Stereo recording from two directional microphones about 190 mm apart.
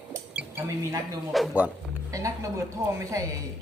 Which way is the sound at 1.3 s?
5° right (ahead or behind).